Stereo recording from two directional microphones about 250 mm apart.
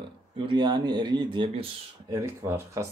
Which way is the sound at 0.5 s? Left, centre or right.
Centre.